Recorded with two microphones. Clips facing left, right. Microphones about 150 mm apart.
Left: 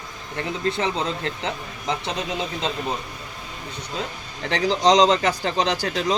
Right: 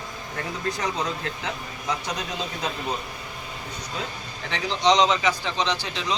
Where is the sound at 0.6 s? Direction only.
25° left (ahead or behind).